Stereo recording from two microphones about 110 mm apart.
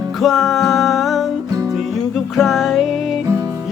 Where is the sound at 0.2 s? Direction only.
Centre (ahead or behind).